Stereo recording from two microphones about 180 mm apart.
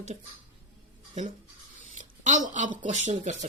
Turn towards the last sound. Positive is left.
turn(degrees=-40)  # may be behind; listen again after turning